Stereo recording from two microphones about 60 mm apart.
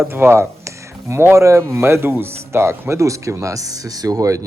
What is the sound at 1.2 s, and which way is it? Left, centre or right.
Speech, right.